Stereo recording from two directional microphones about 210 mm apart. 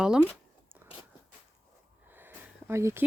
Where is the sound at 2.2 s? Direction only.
10° right (ahead or behind).